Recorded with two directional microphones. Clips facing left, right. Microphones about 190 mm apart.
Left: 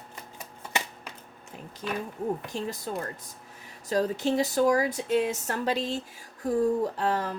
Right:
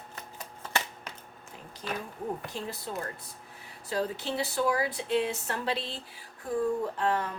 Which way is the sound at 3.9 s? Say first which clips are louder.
Left 6 dB; 45° left (ahead or behind).